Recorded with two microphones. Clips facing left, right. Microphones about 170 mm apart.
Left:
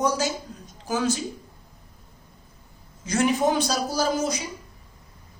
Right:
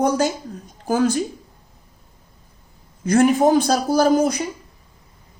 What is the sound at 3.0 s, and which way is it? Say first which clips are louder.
A man's voice: right 7 dB; 55° right (ahead or behind).